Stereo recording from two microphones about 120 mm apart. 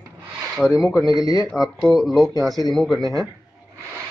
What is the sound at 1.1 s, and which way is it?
Speech, 30° left (ahead or behind).